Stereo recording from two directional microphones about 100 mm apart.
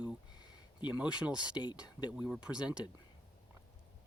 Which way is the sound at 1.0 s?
10° right (ahead or behind).